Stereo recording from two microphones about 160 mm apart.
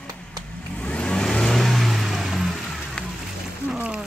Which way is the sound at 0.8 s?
5° left (ahead or behind).